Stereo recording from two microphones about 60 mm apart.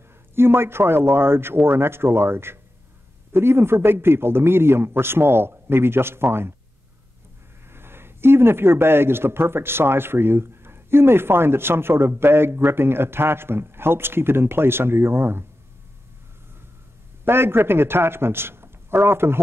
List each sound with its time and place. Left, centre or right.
0.4 s a man's voice: right
7.7 s a man's voice: right
17.2 s a man's voice: right